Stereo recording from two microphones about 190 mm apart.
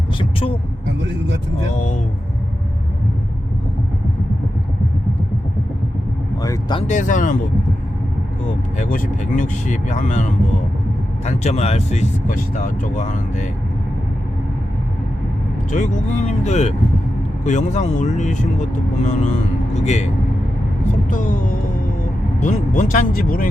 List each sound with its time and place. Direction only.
0.2 s vehicle: 30° left (ahead or behind)
6.4 s speech: 20° left (ahead or behind)
6.8 s speech: 40° left (ahead or behind)
8.8 s speech: 40° left (ahead or behind)
15.7 s speech: 40° left (ahead or behind)
21.1 s speech: 45° left (ahead or behind)